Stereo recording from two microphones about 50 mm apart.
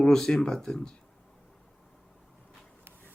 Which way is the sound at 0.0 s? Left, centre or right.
Centre.